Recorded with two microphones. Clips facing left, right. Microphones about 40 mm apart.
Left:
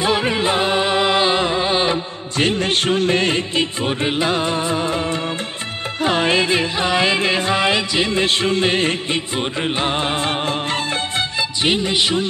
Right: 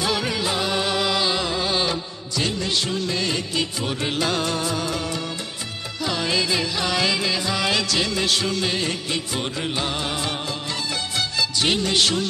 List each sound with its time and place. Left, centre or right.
0.0 s music: left
2.3 s music: left
11.6 s music: left